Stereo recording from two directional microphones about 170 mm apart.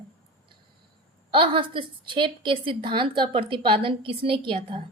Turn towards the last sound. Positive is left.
turn(degrees=-30)  # may be behind; listen again after turning